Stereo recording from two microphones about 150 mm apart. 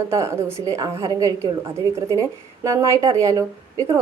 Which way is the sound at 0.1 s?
20° right (ahead or behind).